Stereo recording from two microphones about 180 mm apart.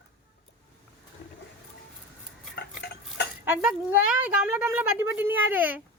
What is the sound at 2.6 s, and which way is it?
Stir, 70° left (ahead or behind).